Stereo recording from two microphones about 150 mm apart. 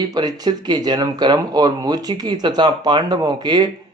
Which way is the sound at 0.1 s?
25° right (ahead or behind).